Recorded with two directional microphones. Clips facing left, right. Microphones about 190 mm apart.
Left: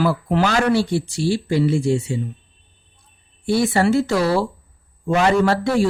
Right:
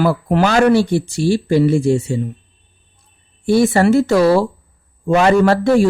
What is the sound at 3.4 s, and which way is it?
Speech, 50° right (ahead or behind).